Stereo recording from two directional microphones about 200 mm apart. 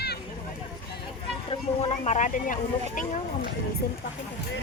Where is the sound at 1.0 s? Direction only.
30° left (ahead or behind).